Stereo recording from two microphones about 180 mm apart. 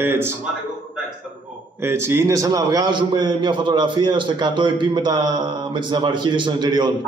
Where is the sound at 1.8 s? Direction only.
15° right (ahead or behind).